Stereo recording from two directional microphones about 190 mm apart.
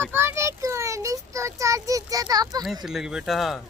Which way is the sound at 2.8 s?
5° right (ahead or behind).